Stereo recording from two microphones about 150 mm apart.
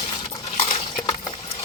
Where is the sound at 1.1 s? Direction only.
40° left (ahead or behind).